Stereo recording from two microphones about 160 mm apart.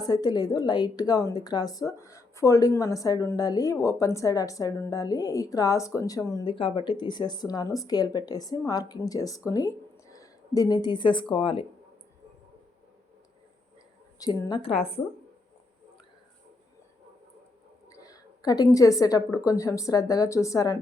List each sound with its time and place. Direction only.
0.0 s a woman's voice: 25° left (ahead or behind)
6.4 s a woman's voice: 30° left (ahead or behind)
14.2 s a woman's voice: 25° left (ahead or behind)
17.8 s a woman's voice: 20° left (ahead or behind)